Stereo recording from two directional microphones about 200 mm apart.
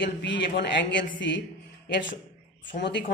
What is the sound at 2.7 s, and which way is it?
Speech, 60° left (ahead or behind).